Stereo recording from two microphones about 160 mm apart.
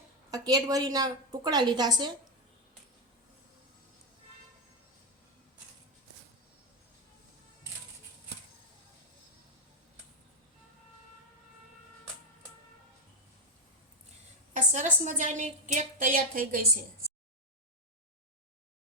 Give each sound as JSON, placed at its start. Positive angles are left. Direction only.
{"t": 0.3, "sound": "a woman's voice", "side_deg": -25}
{"t": 14.5, "sound": "a woman's voice", "side_deg": -50}